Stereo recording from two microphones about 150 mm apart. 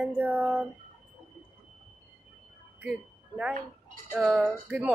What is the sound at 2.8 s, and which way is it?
Speech, 5° right (ahead or behind).